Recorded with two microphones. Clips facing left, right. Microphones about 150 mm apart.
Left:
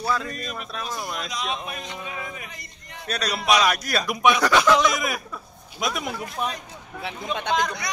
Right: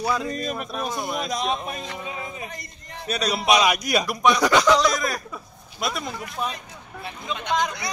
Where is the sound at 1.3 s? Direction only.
40° right (ahead or behind).